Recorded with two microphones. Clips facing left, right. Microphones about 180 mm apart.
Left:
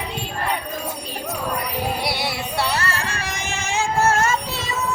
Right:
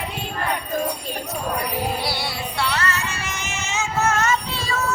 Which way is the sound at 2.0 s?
25° left (ahead or behind).